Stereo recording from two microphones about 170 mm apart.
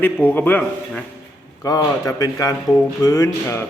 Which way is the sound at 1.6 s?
20° left (ahead or behind).